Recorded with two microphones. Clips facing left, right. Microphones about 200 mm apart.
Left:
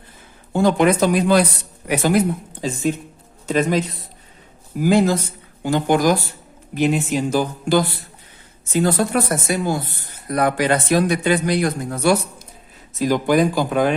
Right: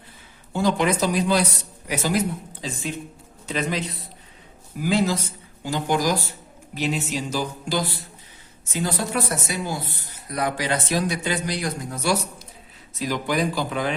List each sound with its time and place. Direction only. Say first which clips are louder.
0.5 s speech: left 6 dB; 50° left (ahead or behind)